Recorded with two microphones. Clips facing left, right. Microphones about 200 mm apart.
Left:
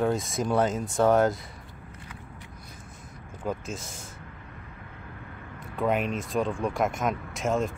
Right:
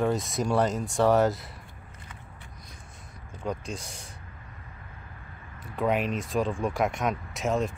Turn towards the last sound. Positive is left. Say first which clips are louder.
# left 1 dB
turn(degrees=0)  # may be behind; listen again after turning